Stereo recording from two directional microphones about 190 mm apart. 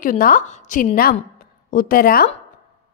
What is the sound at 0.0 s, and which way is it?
Speech, 45° left (ahead or behind).